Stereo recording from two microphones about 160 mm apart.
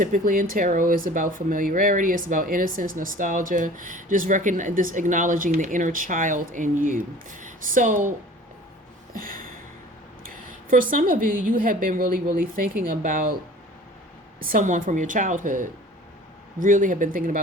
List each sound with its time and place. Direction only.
0.0 s speech: 60° right (ahead or behind)
9.1 s a sound: 60° right (ahead or behind)
10.7 s speech: 55° right (ahead or behind)
14.5 s a woman's voice: 55° right (ahead or behind)